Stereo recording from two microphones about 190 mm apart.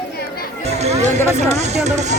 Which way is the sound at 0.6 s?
35° right (ahead or behind).